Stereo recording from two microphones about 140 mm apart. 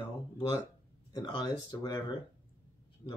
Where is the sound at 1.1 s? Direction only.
30° left (ahead or behind).